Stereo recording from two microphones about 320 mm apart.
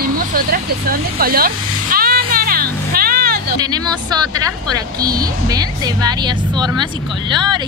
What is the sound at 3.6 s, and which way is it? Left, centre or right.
A woman's voice, centre.